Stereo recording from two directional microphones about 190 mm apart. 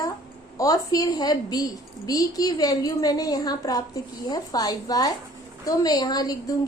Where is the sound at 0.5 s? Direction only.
20° left (ahead or behind).